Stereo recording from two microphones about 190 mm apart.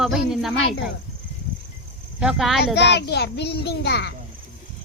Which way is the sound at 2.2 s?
Centre (ahead or behind).